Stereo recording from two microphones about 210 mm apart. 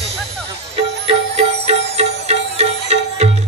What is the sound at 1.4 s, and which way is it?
Music, 30° right (ahead or behind).